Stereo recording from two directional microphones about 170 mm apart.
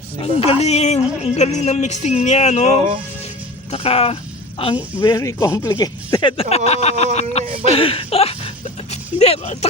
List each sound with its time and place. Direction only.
0.2 s a woman's voice: 35° left (ahead or behind)
5.0 s speech: 20° left (ahead or behind)
6.3 s speech: 35° left (ahead or behind)